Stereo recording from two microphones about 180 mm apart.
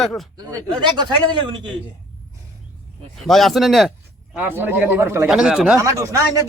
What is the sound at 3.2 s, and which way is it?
Speech, centre (ahead or behind).